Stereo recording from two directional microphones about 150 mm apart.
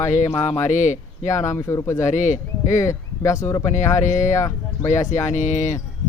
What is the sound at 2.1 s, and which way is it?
Speech, 55° left (ahead or behind).